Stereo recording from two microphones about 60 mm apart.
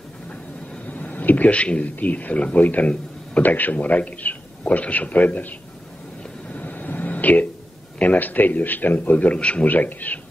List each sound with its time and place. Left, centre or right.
0.8 s a man's voice: left
6.5 s a sound: left
8.0 s a man's voice: left